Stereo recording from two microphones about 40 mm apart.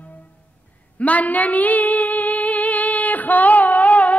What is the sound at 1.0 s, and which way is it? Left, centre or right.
Female singing, left.